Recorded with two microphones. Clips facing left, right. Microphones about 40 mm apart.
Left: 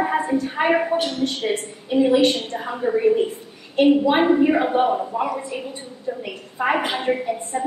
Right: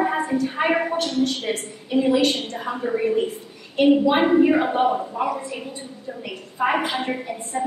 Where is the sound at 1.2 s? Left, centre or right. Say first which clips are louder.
Left 2 dB; left.